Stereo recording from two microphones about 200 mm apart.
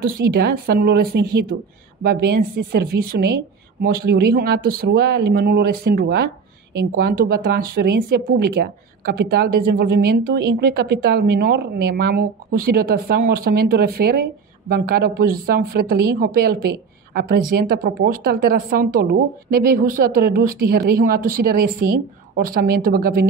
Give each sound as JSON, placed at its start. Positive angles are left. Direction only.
{"t": 0.3, "sound": "a woman's voice", "side_deg": -50}